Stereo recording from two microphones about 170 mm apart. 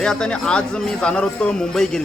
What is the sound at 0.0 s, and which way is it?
A man's voice, 5° left (ahead or behind).